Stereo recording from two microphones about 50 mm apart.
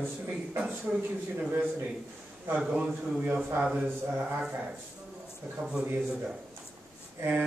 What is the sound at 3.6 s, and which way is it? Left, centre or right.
Speech, centre.